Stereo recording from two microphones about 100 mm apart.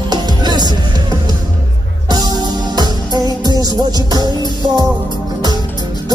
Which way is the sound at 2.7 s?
45° right (ahead or behind).